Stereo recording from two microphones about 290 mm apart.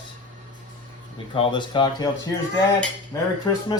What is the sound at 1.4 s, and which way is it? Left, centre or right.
Speech, centre.